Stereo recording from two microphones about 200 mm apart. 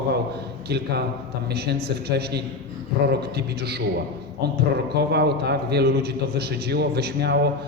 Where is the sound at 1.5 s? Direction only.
55° right (ahead or behind).